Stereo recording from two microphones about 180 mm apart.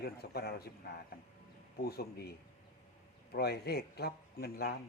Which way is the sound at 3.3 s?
60° left (ahead or behind).